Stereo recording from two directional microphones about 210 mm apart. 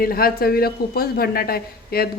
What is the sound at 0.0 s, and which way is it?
A woman's voice, 45° left (ahead or behind).